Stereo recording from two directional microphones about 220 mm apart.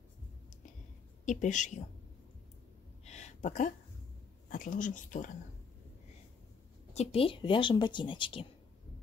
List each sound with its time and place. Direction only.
1.2 s speech: 35° left (ahead or behind)
3.1 s a sound: 30° left (ahead or behind)
4.5 s speech: 35° left (ahead or behind)
6.9 s speech: 30° left (ahead or behind)